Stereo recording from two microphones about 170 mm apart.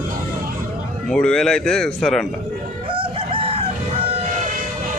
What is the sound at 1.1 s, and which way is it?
Speech, 5° left (ahead or behind).